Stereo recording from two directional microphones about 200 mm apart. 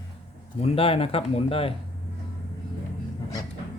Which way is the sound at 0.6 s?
30° left (ahead or behind).